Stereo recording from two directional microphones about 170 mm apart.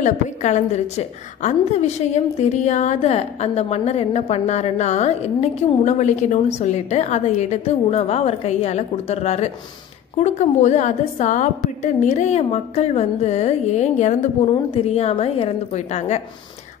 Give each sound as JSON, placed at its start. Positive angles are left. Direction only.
{"t": 0.0, "sound": "a woman's voice", "side_deg": 45}